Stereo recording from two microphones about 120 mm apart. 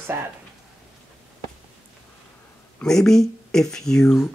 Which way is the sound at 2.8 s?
5° left (ahead or behind).